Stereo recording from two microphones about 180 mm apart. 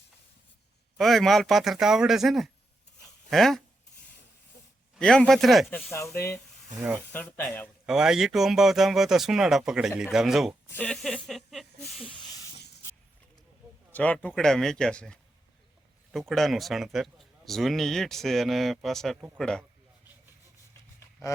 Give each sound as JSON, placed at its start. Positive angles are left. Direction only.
{"t": 0.9, "sound": "speech", "side_deg": 0}
{"t": 3.0, "sound": "a sound", "side_deg": 0}
{"t": 4.9, "sound": "speech", "side_deg": 5}
{"t": 5.9, "sound": "speech", "side_deg": 15}
{"t": 7.9, "sound": "speech", "side_deg": -5}
{"t": 12.0, "sound": "speech", "side_deg": 25}
{"t": 13.9, "sound": "speech", "side_deg": 10}